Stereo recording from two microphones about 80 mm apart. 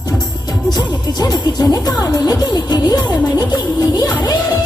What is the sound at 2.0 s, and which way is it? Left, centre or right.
Music, left.